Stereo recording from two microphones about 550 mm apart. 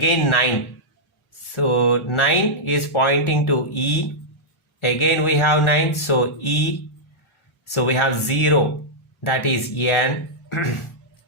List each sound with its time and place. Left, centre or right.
0.0 s speech: left
1.5 s speech: left
7.7 s speech: left